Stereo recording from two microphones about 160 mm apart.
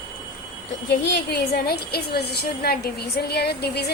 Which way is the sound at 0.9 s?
90° left.